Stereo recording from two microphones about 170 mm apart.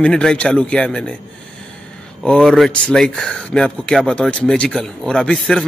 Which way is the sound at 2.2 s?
Centre (ahead or behind).